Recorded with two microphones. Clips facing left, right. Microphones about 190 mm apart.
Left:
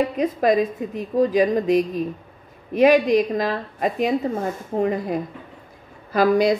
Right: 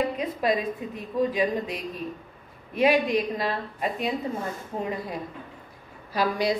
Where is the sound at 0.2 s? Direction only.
45° left (ahead or behind).